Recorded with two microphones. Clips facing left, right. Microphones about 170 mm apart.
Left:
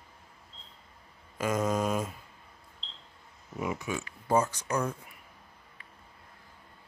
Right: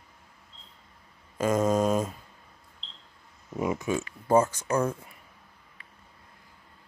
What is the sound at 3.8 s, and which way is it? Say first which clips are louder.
Speech: right 6 dB; 45° right (ahead or behind).